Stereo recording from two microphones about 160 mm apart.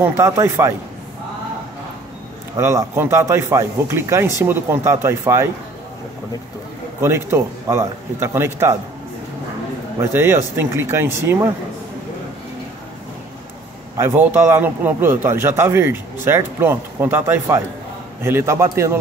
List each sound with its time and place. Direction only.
0.0 s a man's voice: 15° right (ahead or behind)
2.5 s a man's voice: 20° right (ahead or behind)
7.0 s a man's voice: 15° right (ahead or behind)
9.9 s a man's voice: 15° right (ahead or behind)
13.9 s a man's voice: 15° right (ahead or behind)